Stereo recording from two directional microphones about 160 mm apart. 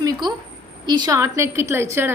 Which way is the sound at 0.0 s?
25° right (ahead or behind).